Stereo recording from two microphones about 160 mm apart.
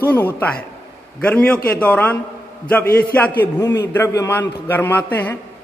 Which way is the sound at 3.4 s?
15° left (ahead or behind).